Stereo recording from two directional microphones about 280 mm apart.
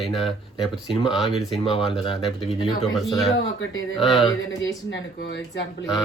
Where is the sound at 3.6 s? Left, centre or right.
Left.